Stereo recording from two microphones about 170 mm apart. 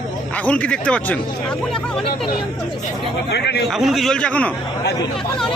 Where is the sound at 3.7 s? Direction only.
Centre (ahead or behind).